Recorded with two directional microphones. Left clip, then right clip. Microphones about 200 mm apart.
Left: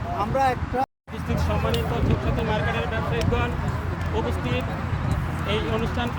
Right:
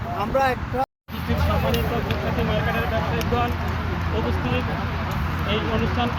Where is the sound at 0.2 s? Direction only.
60° left (ahead or behind).